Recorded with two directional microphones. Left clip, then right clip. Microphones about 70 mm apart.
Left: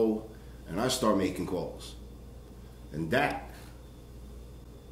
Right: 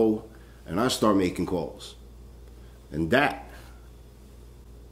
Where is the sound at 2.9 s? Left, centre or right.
Right.